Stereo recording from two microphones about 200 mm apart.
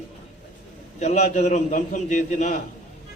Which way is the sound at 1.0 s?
35° left (ahead or behind).